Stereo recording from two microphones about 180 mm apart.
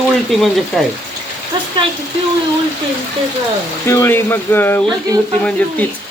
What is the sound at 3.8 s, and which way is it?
Speech, 15° left (ahead or behind).